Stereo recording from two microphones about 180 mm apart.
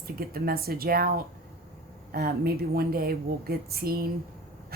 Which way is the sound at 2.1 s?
60° right (ahead or behind).